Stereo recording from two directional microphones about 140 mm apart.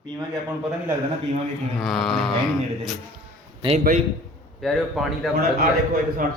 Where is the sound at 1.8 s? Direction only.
Centre (ahead or behind).